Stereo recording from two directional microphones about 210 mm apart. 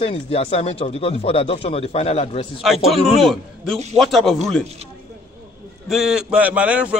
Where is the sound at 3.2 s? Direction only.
Centre (ahead or behind).